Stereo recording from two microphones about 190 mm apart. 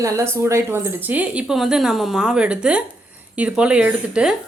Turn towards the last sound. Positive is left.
turn(degrees=-5)  # may be behind; listen again after turning